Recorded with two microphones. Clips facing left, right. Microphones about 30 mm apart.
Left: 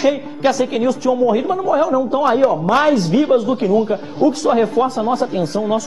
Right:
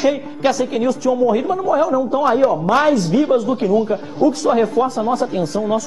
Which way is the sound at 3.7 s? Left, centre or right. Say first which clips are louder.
Left 1 dB; centre.